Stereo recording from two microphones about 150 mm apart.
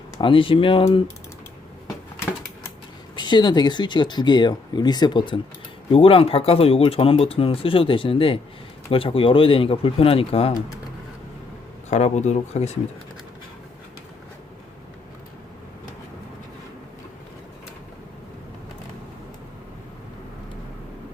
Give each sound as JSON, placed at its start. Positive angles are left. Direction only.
{"t": 0.2, "sound": "speech", "side_deg": 35}
{"t": 3.2, "sound": "speech", "side_deg": 30}
{"t": 11.9, "sound": "speech", "side_deg": 50}